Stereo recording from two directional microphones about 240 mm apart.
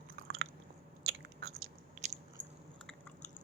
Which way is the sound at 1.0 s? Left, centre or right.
Right.